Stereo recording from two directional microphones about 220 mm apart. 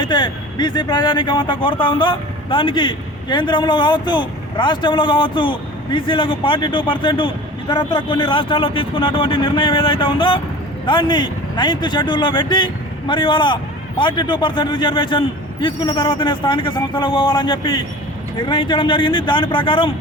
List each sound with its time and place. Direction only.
0.0 s speech: 20° left (ahead or behind)